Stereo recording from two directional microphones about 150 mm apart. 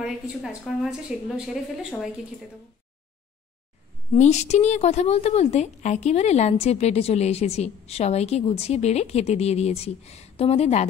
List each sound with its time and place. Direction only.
0.0 s a woman's voice: 5° right (ahead or behind)
4.1 s a woman's voice: 50° left (ahead or behind)